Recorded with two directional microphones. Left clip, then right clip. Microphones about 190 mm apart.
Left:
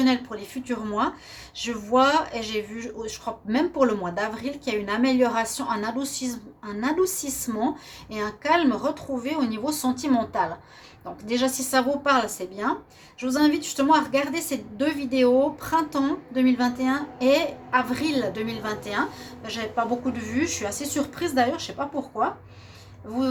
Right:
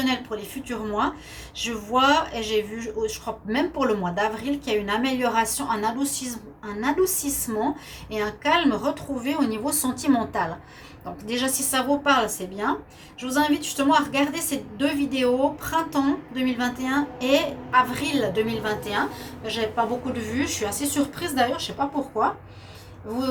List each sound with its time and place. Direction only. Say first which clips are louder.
0.0 s a woman's voice: left 2 dB; 50° left (ahead or behind)